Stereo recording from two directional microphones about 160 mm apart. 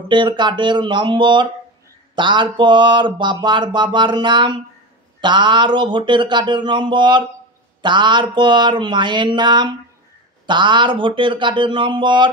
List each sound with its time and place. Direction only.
0.1 s speech: 30° right (ahead or behind)